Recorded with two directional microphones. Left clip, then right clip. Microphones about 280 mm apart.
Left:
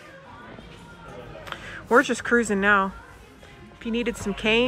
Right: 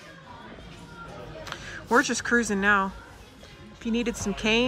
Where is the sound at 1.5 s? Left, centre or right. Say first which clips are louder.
Left 3 dB; centre.